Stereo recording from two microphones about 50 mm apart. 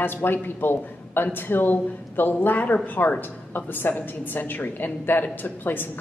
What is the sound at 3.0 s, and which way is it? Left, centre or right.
Speech, left.